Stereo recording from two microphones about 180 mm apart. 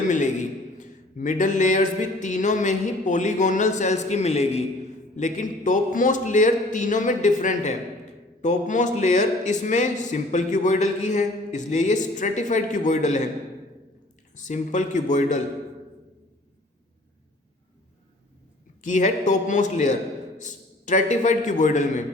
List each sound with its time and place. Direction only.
0.1 s speech: 45° left (ahead or behind)
14.3 s speech: 45° left (ahead or behind)
18.8 s a man's voice: 40° left (ahead or behind)